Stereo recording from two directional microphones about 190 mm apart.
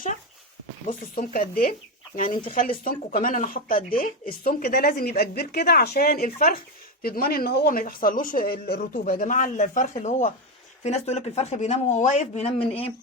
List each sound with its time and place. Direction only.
0.9 s a man's voice: 45° left (ahead or behind)